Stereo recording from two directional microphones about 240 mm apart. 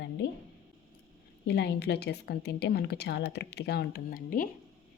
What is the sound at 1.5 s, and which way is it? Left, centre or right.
A woman's voice, left.